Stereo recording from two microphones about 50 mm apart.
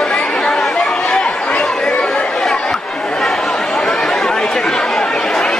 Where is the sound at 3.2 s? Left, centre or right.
Centre.